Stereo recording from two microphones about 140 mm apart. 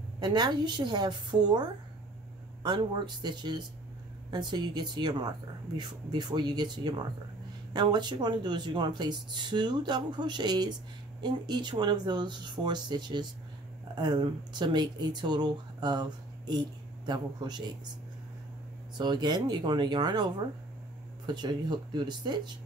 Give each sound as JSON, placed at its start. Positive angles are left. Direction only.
{"t": 0.2, "sound": "speech", "side_deg": -30}
{"t": 18.9, "sound": "speech", "side_deg": -30}